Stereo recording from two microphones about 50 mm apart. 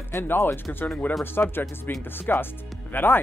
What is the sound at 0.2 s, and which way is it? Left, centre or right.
Speech, left.